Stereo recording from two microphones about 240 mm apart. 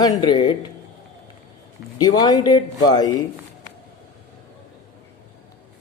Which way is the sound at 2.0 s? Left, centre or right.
Centre.